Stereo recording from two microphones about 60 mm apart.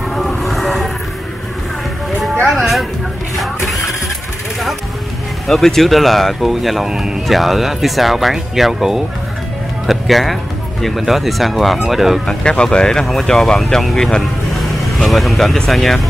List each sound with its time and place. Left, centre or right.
0.1 s vehicle: centre
2.5 s music: centre
3.3 s a sound: centre
5.5 s speech: centre
12.3 s speech: centre